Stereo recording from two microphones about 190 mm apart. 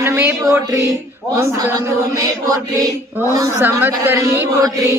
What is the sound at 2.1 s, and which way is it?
Mantra, 20° right (ahead or behind).